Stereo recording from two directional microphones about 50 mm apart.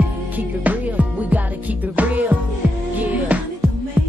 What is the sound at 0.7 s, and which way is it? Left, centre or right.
Music, right.